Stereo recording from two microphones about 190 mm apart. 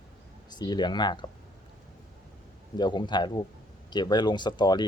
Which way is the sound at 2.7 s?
25° left (ahead or behind).